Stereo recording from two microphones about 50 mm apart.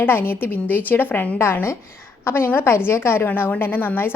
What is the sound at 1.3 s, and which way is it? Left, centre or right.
A woman's voice, left.